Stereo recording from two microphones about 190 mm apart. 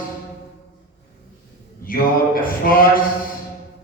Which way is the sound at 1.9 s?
50° left (ahead or behind).